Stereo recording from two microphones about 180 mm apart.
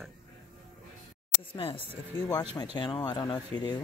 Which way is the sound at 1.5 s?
30° left (ahead or behind).